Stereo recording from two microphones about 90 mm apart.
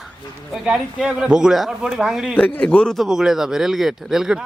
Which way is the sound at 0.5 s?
5° right (ahead or behind).